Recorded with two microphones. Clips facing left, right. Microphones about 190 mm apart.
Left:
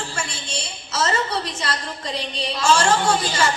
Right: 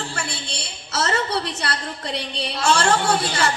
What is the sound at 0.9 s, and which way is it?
A woman's voice, 65° right (ahead or behind).